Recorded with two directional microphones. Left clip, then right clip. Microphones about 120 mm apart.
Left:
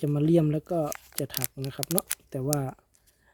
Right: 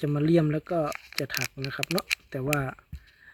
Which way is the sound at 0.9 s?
55° left (ahead or behind).